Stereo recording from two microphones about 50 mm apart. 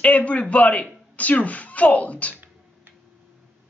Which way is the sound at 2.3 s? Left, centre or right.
Right.